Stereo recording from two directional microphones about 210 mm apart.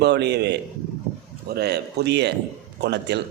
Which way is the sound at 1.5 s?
50° right (ahead or behind).